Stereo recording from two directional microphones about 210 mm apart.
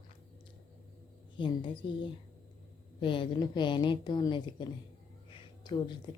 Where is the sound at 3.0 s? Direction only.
25° left (ahead or behind).